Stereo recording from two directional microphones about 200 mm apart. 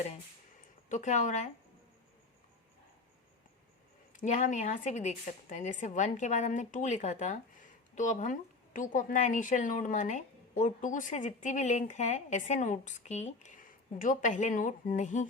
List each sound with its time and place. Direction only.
0.9 s a woman's voice: 35° left (ahead or behind)
4.2 s a woman's voice: 40° left (ahead or behind)